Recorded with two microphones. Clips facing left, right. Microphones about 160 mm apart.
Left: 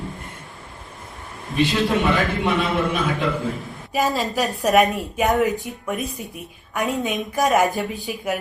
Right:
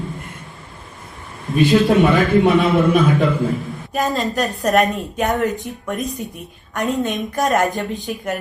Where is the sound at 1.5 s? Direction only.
45° right (ahead or behind).